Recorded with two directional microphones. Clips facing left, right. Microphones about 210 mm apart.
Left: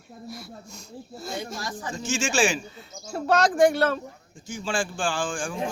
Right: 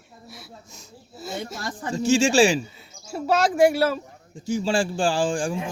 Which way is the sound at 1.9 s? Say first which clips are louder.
Right 9 dB; 35° right (ahead or behind).